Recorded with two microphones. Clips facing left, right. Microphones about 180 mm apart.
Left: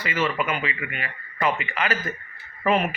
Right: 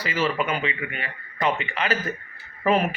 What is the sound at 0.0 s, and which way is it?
Speech, 35° right (ahead or behind).